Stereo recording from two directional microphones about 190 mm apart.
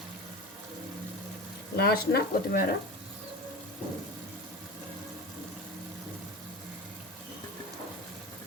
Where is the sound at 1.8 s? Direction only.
55° left (ahead or behind).